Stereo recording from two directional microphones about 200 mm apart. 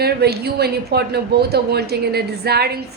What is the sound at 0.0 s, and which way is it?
A woman's voice, 55° right (ahead or behind).